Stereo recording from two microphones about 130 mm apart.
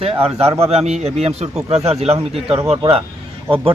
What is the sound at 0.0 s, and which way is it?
A man's voice, 50° right (ahead or behind).